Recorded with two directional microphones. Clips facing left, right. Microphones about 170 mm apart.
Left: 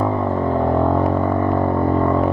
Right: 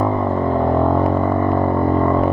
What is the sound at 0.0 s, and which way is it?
Vehicle, 25° right (ahead or behind).